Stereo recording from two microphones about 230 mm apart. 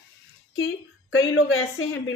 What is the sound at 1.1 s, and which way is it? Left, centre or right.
Speech, left.